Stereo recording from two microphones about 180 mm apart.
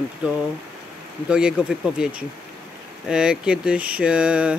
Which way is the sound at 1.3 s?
5° right (ahead or behind).